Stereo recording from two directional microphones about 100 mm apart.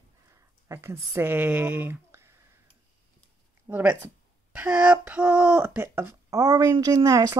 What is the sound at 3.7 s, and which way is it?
Speech, 15° right (ahead or behind).